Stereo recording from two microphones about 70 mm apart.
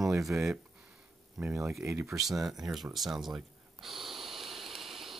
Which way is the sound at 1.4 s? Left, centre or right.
Centre.